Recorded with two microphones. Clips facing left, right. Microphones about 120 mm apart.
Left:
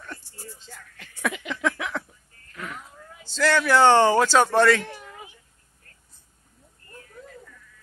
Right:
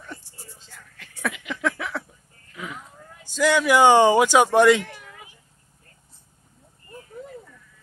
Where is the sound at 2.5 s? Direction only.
10° right (ahead or behind).